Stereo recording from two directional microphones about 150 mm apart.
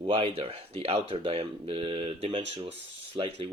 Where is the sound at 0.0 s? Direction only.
40° right (ahead or behind).